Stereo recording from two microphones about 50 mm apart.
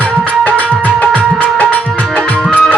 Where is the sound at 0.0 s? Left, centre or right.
Left.